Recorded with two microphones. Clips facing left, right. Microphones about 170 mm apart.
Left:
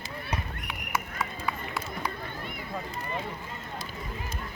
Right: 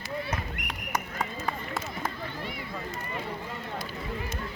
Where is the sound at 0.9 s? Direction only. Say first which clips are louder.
Right 1 dB; 45° right (ahead or behind).